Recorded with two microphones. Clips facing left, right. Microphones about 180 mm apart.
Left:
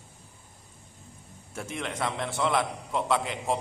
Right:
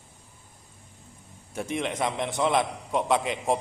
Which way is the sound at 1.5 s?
20° right (ahead or behind).